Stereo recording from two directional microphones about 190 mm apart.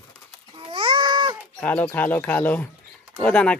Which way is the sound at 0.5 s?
25° right (ahead or behind).